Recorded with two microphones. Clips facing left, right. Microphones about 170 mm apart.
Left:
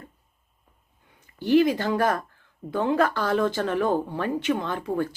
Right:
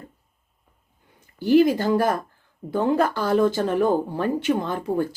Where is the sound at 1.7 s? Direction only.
35° right (ahead or behind).